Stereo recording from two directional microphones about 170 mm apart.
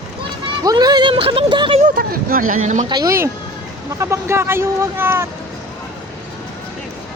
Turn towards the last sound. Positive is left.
turn(degrees=-15)  # may be behind; listen again after turning